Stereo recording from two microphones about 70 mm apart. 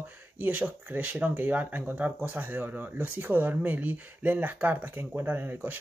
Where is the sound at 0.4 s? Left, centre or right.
Right.